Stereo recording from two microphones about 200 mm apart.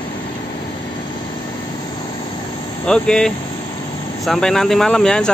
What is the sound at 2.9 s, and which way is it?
Speech, 5° left (ahead or behind).